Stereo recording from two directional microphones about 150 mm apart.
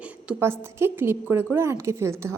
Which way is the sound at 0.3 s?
15° right (ahead or behind).